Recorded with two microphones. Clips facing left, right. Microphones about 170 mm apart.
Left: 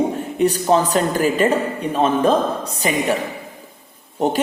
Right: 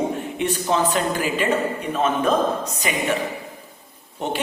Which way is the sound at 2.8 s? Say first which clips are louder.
Left 6 dB; 35° left (ahead or behind).